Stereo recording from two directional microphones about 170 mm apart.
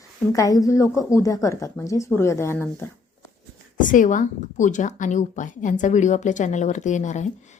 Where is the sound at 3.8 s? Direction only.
50° left (ahead or behind).